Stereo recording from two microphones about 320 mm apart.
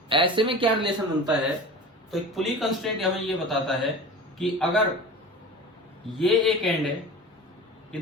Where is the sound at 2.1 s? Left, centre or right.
Centre.